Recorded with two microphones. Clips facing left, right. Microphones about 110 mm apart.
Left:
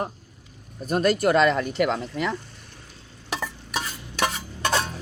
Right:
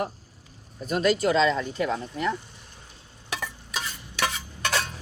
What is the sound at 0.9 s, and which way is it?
Speech, 50° left (ahead or behind).